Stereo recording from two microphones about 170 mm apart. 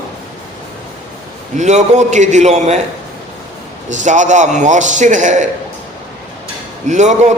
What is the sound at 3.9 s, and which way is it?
A man's voice, 45° right (ahead or behind).